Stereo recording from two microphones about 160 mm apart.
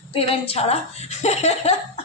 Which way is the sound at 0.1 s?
35° left (ahead or behind).